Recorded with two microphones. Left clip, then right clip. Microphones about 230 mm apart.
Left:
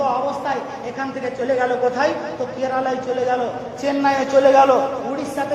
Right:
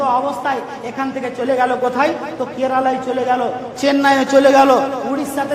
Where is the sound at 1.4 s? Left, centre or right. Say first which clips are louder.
Right 3 dB; right.